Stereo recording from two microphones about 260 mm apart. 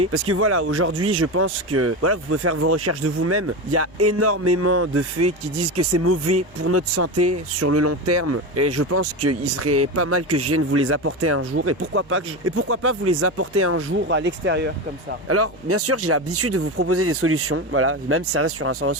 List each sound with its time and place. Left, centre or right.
0.1 s speech: right
15.3 s speech: right